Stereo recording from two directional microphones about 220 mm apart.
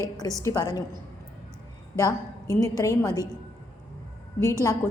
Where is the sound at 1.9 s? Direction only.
15° left (ahead or behind).